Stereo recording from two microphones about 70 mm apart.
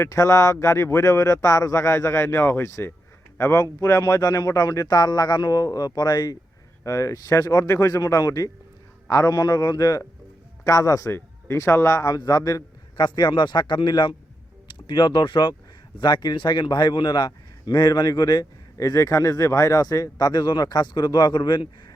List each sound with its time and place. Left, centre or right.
0.0 s speech: left
2.6 s speech: left
3.6 s speech: left
6.8 s a man's voice: left
9.3 s speech: left
10.6 s speech: left
11.1 s speech: left
13.0 s a man's voice: left
18.8 s speech: left